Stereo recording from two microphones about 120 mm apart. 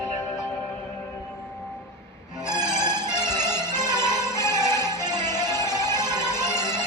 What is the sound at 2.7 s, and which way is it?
Music, 35° right (ahead or behind).